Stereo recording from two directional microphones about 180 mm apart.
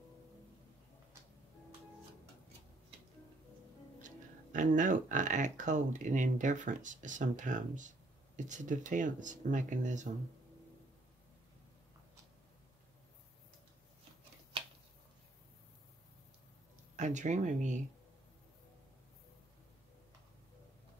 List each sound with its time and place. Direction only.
4.0 s speech: 45° right (ahead or behind)
16.9 s speech: 40° right (ahead or behind)